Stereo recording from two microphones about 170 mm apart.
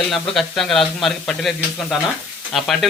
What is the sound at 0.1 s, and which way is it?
A man's voice, centre (ahead or behind).